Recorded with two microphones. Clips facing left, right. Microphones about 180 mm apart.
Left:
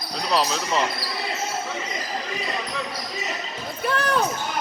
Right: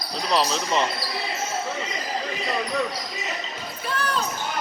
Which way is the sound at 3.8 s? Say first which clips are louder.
Left 4 dB; 60° left (ahead or behind).